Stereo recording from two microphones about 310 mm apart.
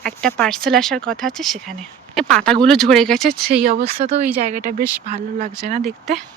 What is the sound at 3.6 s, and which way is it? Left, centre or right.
Speech, right.